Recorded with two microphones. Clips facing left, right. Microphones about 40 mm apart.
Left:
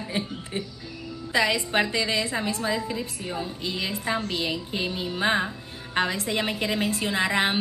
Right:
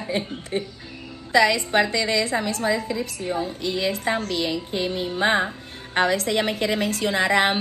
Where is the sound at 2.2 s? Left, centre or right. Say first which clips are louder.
Right 4 dB; right.